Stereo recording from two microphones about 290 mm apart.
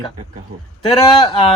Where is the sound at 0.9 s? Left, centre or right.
Centre.